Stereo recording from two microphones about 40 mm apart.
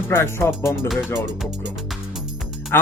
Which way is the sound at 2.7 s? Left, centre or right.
Left.